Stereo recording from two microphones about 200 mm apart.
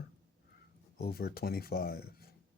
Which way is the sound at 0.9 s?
50° left (ahead or behind).